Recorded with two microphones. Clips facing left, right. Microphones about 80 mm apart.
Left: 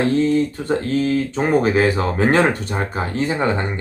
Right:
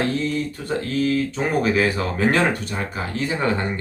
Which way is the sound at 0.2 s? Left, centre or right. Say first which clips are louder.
Left 7 dB; left.